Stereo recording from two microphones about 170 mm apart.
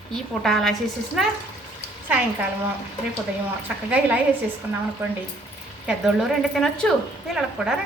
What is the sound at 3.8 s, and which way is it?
Speech, 5° right (ahead or behind).